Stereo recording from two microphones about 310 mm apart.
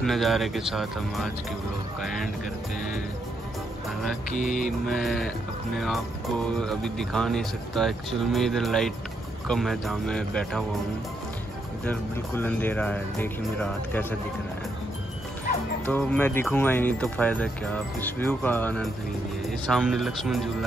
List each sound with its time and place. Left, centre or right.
0.0 s speech: centre
4.3 s mantra: left
4.8 s speech: centre
6.6 s speech: centre
11.8 s speech: centre
15.8 s speech: centre